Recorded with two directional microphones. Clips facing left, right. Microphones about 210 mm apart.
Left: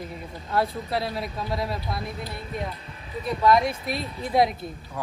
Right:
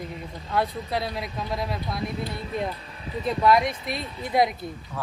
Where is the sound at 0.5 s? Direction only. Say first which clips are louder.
Left 1 dB; centre (ahead or behind).